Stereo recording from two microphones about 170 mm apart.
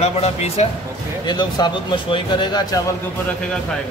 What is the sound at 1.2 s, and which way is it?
Speech, 25° left (ahead or behind).